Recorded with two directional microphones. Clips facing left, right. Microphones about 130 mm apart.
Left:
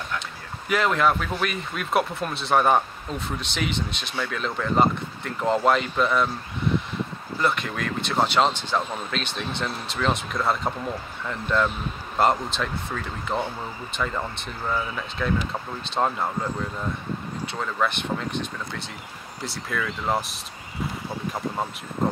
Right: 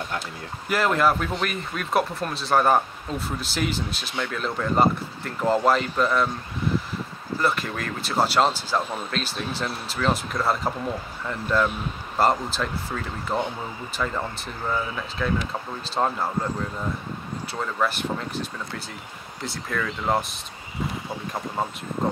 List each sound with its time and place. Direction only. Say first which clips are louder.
0.7 s speech: even; 5° right (ahead or behind)
7.3 s speech: even; centre (ahead or behind)
17.5 s speech: right 1 dB; 5° right (ahead or behind)